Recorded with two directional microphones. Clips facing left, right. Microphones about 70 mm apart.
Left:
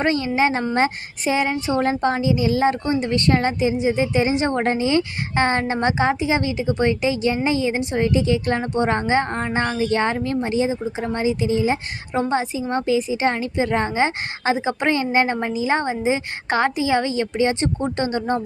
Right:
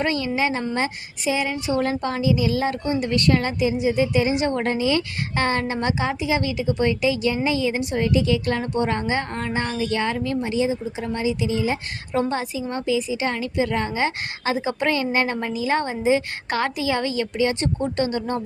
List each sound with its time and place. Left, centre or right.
0.0 s a woman's voice: left
1.5 s a woman's voice: left